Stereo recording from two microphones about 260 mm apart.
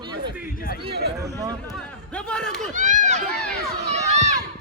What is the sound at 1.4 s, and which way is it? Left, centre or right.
Speech, centre.